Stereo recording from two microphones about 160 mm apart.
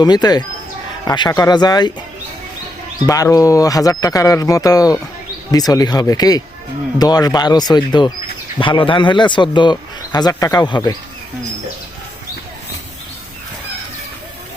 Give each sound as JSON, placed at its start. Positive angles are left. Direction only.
{"t": 0.0, "sound": "speech", "side_deg": 25}
{"t": 3.1, "sound": "speech", "side_deg": 20}